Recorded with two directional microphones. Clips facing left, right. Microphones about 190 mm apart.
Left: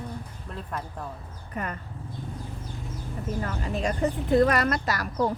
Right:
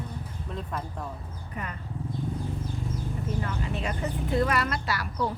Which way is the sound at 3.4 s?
40° left (ahead or behind).